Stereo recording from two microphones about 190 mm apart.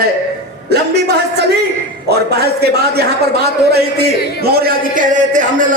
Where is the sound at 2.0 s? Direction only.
60° right (ahead or behind).